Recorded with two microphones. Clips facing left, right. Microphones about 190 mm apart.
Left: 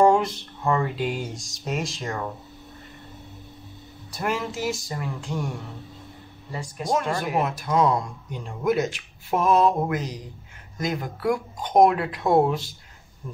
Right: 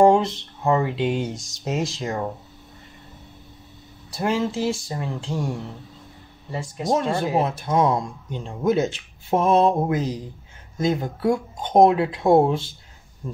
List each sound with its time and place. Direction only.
0.0 s speech: 20° right (ahead or behind)
4.1 s speech: 25° right (ahead or behind)
6.5 s speech: 25° right (ahead or behind)